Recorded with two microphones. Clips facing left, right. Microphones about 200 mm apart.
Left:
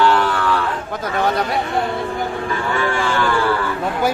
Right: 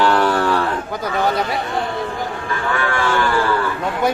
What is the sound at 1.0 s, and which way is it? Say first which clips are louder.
Speech: left 1 dB; centre (ahead or behind).